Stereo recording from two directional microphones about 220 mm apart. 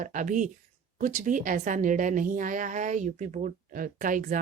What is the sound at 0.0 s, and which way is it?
A woman's voice, 35° right (ahead or behind).